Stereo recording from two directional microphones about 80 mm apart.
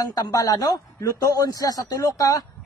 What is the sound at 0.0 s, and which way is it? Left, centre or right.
Speech, left.